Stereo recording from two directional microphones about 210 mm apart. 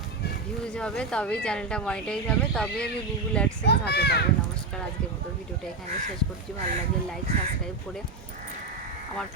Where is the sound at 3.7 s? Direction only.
50° left (ahead or behind).